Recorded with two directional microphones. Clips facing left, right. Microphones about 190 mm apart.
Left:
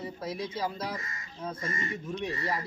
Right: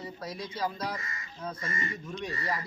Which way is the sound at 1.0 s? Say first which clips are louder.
Right 1 dB; 45° left (ahead or behind).